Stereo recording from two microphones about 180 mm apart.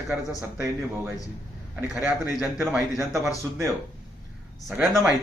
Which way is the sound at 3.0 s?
15° right (ahead or behind).